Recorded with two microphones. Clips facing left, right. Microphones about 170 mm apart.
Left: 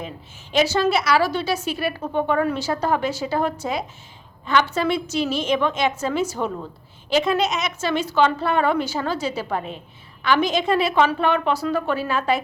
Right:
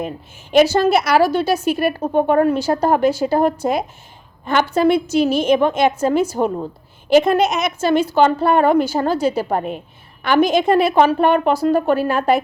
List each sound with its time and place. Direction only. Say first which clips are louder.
0.5 s a woman's voice: right 6 dB; 55° right (ahead or behind)